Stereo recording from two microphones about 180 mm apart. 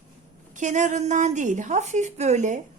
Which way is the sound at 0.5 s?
40° right (ahead or behind).